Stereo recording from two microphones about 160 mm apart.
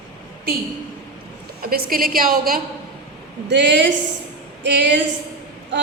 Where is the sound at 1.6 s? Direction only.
70° right (ahead or behind).